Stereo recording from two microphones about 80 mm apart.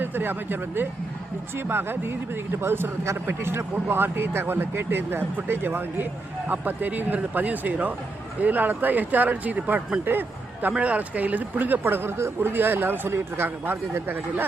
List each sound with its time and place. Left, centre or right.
0.0 s speech: right